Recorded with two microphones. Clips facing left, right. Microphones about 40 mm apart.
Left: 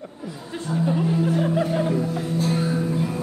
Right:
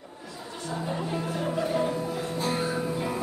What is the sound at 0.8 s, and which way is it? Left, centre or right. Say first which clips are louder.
Music: left 9 dB; centre.